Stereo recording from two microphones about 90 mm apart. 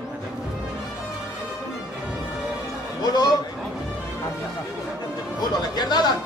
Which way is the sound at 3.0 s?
50° left (ahead or behind).